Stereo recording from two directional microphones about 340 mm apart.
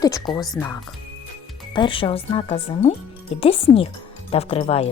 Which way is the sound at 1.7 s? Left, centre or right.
Centre.